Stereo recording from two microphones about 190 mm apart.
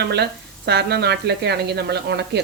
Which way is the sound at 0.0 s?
60° right (ahead or behind).